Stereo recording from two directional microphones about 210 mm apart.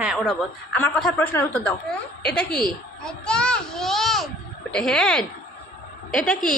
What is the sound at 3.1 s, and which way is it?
A child's voice, 5° left (ahead or behind).